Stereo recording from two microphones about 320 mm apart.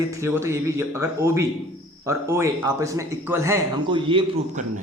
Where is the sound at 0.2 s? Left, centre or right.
Centre.